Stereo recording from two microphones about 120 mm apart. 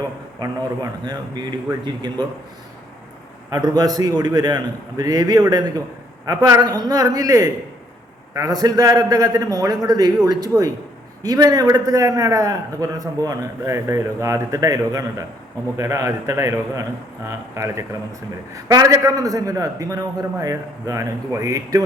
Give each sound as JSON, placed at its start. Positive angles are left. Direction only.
{"t": 0.3, "sound": "a man's voice", "side_deg": -35}
{"t": 3.5, "sound": "a man's voice", "side_deg": -30}